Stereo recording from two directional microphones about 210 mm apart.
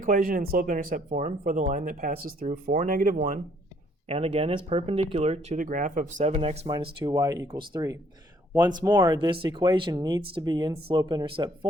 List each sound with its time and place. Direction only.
0.0 s speech: 40° right (ahead or behind); by 11.5 s 20° right (ahead or behind)